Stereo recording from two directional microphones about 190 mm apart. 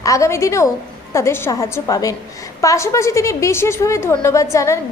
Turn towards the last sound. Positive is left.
turn(degrees=15)  # may be behind; listen again after turning